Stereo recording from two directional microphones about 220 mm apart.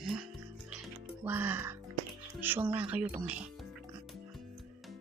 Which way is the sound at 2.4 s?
10° right (ahead or behind).